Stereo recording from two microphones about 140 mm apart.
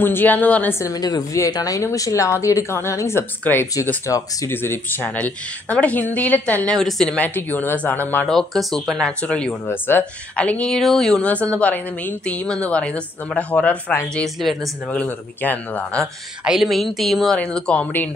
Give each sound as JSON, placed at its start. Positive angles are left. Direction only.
{"t": 0.0, "sound": "a woman's voice", "side_deg": 15}
{"t": 8.3, "sound": "a woman's voice", "side_deg": 0}
{"t": 16.4, "sound": "speech", "side_deg": 0}